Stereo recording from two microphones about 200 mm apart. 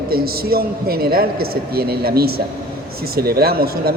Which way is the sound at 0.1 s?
50° right (ahead or behind).